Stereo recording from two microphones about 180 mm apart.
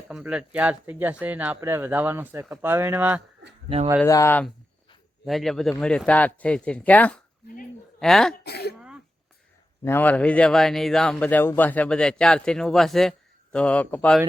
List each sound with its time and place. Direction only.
0.1 s speech: 5° right (ahead or behind)
4.0 s speech: 15° left (ahead or behind)
5.2 s speech: centre (ahead or behind)
7.4 s a sound: 50° left (ahead or behind)
7.9 s speech: centre (ahead or behind)
8.4 s speech: 65° left (ahead or behind)
9.8 s speech: 10° left (ahead or behind)